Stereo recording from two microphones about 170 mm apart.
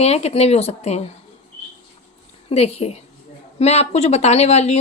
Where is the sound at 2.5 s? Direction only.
35° left (ahead or behind).